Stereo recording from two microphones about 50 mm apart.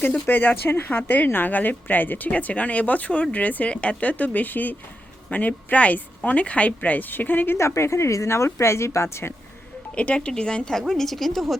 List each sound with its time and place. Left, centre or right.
0.0 s speech: left
7.5 s a woman's voice: left
9.9 s a woman's voice: left; by 11.5 s centre